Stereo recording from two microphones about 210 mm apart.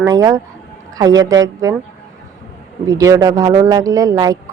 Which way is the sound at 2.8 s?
15° right (ahead or behind).